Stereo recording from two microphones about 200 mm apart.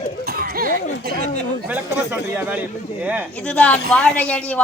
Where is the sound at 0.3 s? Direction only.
50° right (ahead or behind).